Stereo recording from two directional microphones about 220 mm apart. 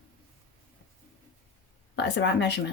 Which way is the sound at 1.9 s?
50° left (ahead or behind).